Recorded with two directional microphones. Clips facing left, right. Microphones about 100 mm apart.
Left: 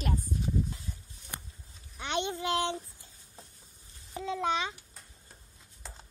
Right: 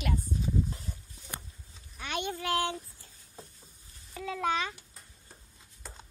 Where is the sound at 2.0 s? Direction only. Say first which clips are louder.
Left 2 dB; 25° left (ahead or behind).